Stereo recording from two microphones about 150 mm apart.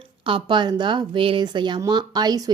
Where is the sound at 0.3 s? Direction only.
35° right (ahead or behind).